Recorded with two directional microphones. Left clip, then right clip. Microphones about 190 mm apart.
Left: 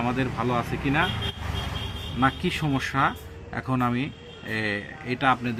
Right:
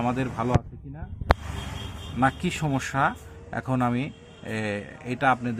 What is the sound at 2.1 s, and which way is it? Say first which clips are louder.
Speech: even; 30° right (ahead or behind).